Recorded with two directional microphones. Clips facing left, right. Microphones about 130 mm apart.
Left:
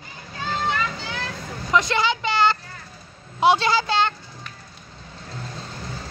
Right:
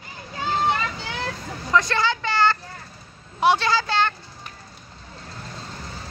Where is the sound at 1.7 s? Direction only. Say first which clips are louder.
Even; 20° left (ahead or behind).